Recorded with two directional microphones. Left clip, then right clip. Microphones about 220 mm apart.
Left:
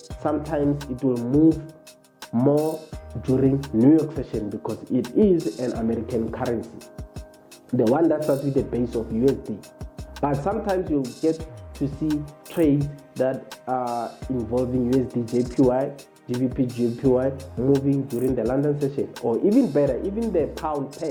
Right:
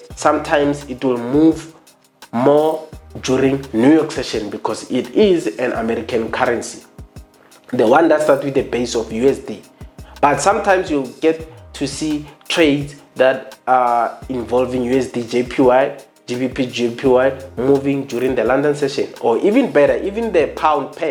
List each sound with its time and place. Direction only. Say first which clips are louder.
0.2 s speech: right 10 dB; 15° right (ahead or behind)
1.1 s speech: right 6 dB; 25° right (ahead or behind)
2.3 s speech: right 8 dB; 10° right (ahead or behind)
2.6 s speech: right 9 dB; 25° right (ahead or behind)
3.2 s speech: right 6 dB; 10° right (ahead or behind)